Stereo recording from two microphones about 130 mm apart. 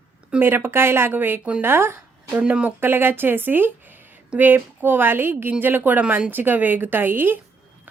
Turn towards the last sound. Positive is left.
turn(degrees=-15)  # may be behind; listen again after turning